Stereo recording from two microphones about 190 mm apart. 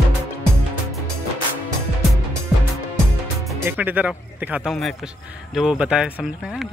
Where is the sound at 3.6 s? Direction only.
10° right (ahead or behind).